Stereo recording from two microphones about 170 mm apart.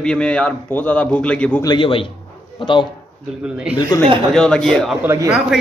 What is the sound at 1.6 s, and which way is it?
A man's voice, 25° left (ahead or behind).